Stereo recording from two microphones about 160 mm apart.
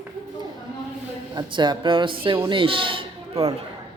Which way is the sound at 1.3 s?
30° right (ahead or behind).